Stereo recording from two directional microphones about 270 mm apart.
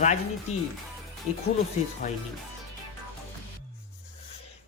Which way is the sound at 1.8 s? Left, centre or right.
Left.